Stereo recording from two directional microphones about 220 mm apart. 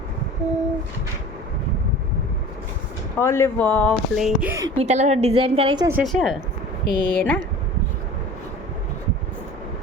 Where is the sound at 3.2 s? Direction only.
10° left (ahead or behind); by 4.7 s 10° right (ahead or behind).